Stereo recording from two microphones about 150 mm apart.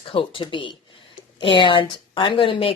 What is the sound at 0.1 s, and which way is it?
Speech, 35° left (ahead or behind).